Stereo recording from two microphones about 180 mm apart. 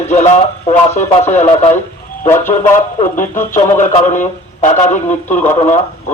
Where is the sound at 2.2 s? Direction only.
15° left (ahead or behind).